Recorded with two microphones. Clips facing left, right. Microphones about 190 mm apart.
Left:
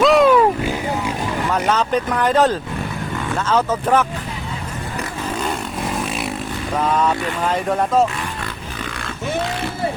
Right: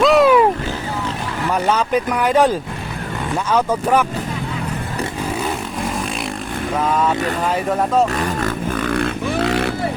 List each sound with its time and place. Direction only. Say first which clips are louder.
0.0 s wild animals: even; centre (ahead or behind)
1.5 s speech: right 2 dB; 10° right (ahead or behind)
6.8 s speech: even; 5° right (ahead or behind)
8.8 s grunt: right 7 dB; 55° right (ahead or behind)